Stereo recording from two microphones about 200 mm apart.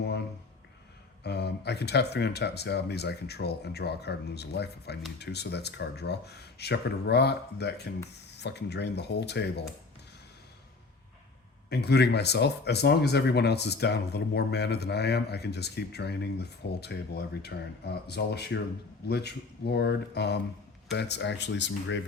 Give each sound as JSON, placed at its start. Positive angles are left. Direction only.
{"t": 0.0, "sound": "a sound", "side_deg": 55}
{"t": 1.2, "sound": "speech", "side_deg": 55}
{"t": 11.7, "sound": "speech", "side_deg": 55}